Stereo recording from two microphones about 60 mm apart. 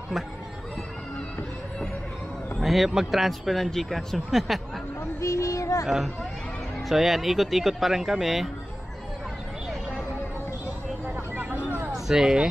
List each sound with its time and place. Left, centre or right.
2.6 s speech: centre
5.2 s speech: left
5.9 s speech: centre
11.3 s a sound: right
11.9 s speech: centre